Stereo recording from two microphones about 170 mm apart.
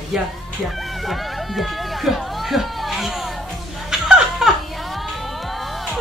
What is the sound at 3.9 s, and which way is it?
Laughter, 5° right (ahead or behind).